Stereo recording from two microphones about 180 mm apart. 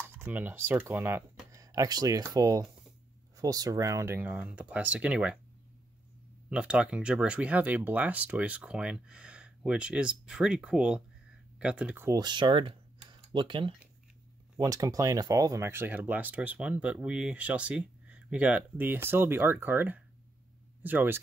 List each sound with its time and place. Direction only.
0.2 s speech: 10° right (ahead or behind)
6.5 s speech: 5° right (ahead or behind)